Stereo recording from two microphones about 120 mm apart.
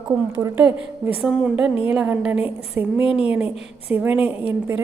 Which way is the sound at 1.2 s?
5° right (ahead or behind).